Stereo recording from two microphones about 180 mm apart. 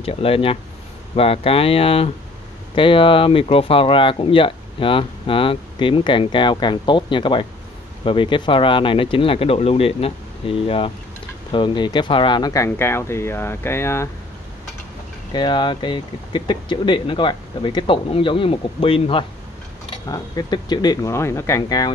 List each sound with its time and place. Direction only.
0.0 s speech: 30° left (ahead or behind); by 14.0 s 15° left (ahead or behind)
15.3 s speech: 25° left (ahead or behind)